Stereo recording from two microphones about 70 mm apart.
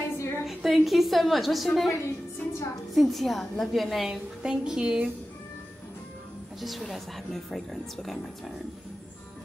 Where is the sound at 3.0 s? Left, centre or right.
Centre.